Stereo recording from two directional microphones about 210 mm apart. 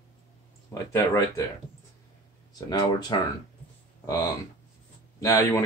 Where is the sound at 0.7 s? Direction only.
15° left (ahead or behind).